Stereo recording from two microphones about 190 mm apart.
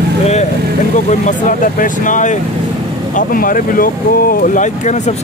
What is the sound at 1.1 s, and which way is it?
Speech, 40° left (ahead or behind).